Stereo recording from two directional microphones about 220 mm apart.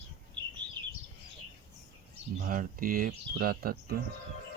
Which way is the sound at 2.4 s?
40° right (ahead or behind).